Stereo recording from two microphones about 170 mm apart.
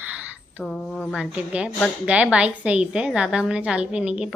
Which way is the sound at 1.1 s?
5° right (ahead or behind).